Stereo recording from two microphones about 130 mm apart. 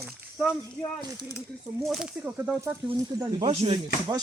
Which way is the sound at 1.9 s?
5° right (ahead or behind).